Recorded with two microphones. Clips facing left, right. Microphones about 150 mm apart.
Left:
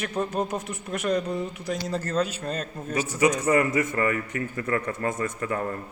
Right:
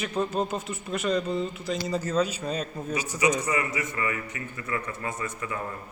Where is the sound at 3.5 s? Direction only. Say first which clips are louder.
Left 7 dB; 50° left (ahead or behind).